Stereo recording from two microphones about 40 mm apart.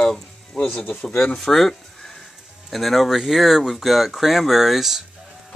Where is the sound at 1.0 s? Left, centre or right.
Left.